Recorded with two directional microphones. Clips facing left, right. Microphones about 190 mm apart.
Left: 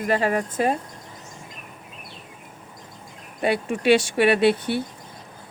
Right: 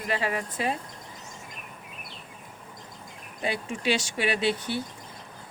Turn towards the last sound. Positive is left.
turn(degrees=60)  # may be behind; listen again after turning